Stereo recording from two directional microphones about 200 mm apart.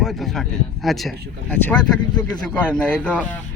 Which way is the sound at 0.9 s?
Centre (ahead or behind).